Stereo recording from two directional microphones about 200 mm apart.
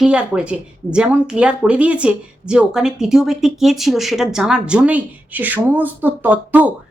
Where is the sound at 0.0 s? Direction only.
5° right (ahead or behind).